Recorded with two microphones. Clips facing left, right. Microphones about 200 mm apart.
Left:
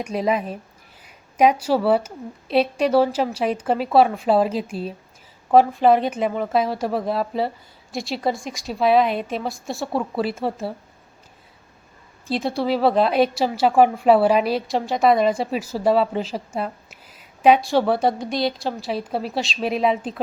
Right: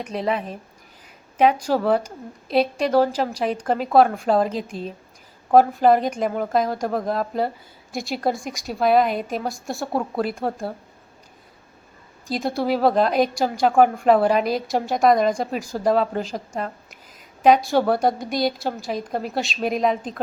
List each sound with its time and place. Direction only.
0.0 s a woman's voice: 10° left (ahead or behind)
12.4 s a woman's voice: centre (ahead or behind)